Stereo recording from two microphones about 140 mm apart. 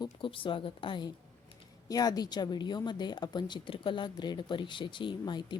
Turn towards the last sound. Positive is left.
turn(degrees=35)  # may be behind; listen again after turning